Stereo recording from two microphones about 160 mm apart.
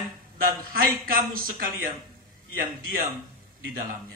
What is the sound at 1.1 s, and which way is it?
Speech, 65° right (ahead or behind).